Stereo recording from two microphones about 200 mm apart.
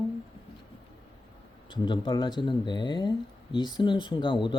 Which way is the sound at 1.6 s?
25° left (ahead or behind).